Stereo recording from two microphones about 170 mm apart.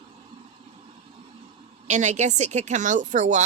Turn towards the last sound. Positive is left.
turn(degrees=-45)  # may be behind; listen again after turning